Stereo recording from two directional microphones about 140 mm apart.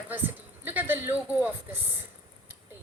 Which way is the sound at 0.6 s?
15° right (ahead or behind).